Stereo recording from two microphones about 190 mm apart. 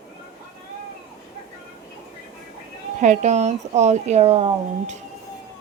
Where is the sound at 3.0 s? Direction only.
40° right (ahead or behind).